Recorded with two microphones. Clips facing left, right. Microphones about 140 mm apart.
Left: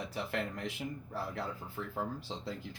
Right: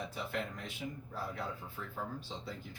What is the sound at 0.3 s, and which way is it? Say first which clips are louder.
Speech: left 3 dB; 85° left.